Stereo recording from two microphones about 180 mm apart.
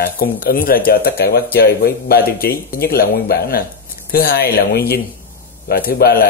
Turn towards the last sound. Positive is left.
turn(degrees=55)  # may be behind; listen again after turning